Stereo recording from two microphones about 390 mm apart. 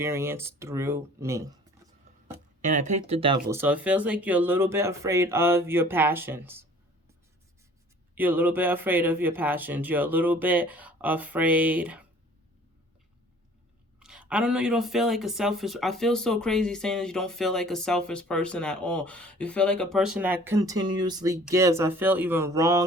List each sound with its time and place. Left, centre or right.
0.0 s speech: centre
2.6 s speech: centre
8.1 s speech: centre
14.0 s speech: centre